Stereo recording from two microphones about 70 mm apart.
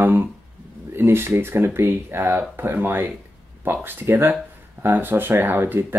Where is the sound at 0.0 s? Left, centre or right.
Right.